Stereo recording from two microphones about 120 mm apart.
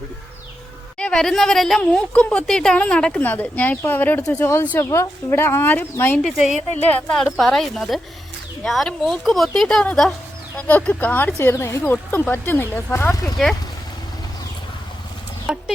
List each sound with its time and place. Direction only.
0.9 s a woman's voice: 5° left (ahead or behind)
6.2 s a woman's voice: centre (ahead or behind); by 13.3 s 20° left (ahead or behind)
15.5 s speech: 10° right (ahead or behind)